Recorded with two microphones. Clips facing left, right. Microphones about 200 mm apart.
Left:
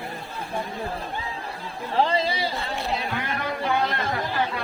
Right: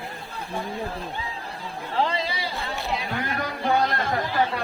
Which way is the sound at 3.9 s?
40° right (ahead or behind).